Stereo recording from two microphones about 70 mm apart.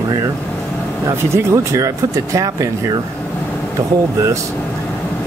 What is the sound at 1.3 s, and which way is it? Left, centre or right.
Speech, right.